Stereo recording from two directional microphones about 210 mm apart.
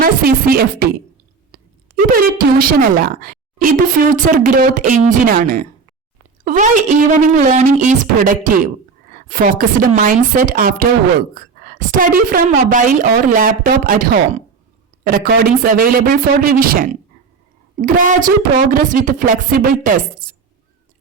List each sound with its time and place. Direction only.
0.0 s a man's voice: 45° right (ahead or behind)
2.1 s a woman's voice: 45° right (ahead or behind)